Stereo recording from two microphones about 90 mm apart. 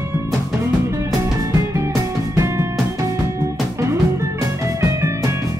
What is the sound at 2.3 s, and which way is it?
Music, 30° right (ahead or behind).